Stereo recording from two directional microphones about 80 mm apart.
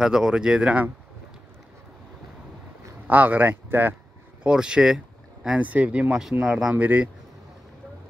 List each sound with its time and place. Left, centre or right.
0.0 s speech: centre
3.1 s speech: right
4.4 s speech: centre
5.6 s speech: centre
6.7 s speech: centre